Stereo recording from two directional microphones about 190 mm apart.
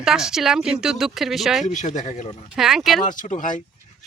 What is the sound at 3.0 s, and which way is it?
Speech, 40° left (ahead or behind).